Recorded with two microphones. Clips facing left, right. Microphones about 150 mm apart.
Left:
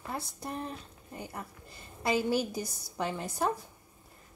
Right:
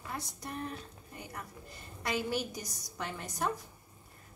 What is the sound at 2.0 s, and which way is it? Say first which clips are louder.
A woman's voice: left 5 dB; 30° left (ahead or behind).